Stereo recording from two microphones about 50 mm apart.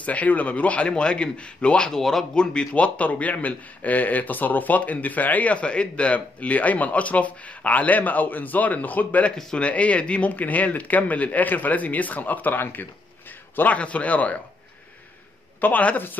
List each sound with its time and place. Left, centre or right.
0.0 s a man's voice: left
1.9 s speech: centre
2.3 s a man's voice: centre; by 12.8 s left
13.7 s a man's voice: left
15.6 s a man's voice: left